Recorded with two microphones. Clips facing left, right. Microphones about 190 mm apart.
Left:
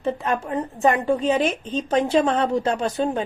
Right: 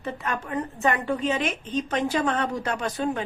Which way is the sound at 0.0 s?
30° left (ahead or behind).